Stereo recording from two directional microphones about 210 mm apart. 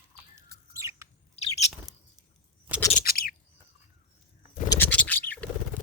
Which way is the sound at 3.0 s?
45° left (ahead or behind).